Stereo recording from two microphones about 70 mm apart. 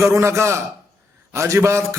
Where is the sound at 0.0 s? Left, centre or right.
Right.